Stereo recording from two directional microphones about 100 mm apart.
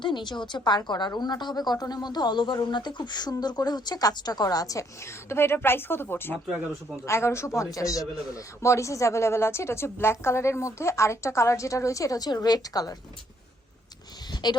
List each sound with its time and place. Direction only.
0.0 s a woman's voice: 50° left (ahead or behind)
5.3 s a man's voice: 25° left (ahead or behind)
14.4 s a woman's voice: 45° left (ahead or behind)